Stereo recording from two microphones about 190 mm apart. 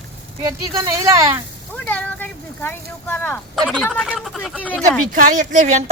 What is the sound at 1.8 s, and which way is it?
Speech, 10° left (ahead or behind).